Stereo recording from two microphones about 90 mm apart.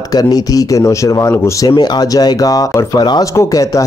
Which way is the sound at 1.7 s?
50° left (ahead or behind).